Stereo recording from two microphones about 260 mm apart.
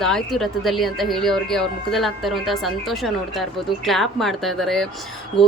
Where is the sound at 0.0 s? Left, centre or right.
Centre.